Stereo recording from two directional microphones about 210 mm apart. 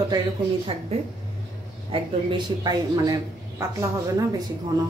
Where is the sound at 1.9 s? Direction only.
25° right (ahead or behind).